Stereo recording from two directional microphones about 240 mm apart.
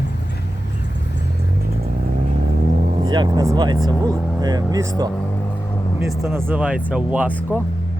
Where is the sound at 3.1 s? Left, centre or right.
Centre.